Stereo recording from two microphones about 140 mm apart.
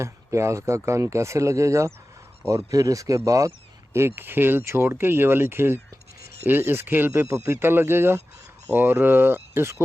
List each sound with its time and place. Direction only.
0.0 s speech: 20° right (ahead or behind)